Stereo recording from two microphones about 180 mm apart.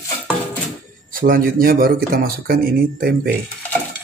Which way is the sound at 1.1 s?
50° right (ahead or behind).